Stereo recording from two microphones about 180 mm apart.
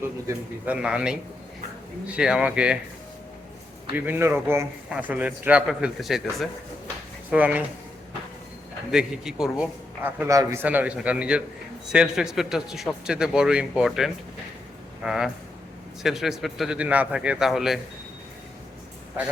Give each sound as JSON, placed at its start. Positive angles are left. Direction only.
{"t": 0.3, "sound": "a man's voice", "side_deg": -10}
{"t": 3.9, "sound": "a man's voice", "side_deg": -10}
{"t": 8.9, "sound": "a man's voice", "side_deg": -5}